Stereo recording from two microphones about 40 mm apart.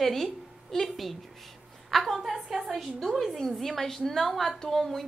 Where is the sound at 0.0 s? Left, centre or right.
Centre.